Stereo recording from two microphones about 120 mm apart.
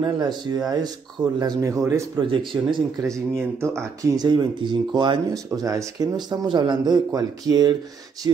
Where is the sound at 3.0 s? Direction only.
25° right (ahead or behind).